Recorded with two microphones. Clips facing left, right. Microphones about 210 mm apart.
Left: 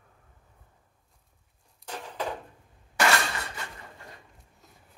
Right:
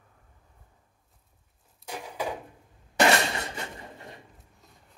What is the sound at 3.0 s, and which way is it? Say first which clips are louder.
Shatter: right 4 dB; 25° right (ahead or behind).